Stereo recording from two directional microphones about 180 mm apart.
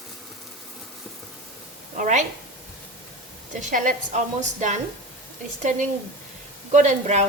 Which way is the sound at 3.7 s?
50° right (ahead or behind).